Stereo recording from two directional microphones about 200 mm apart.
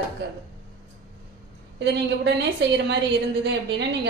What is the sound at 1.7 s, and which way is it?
A woman's voice, 60° right (ahead or behind).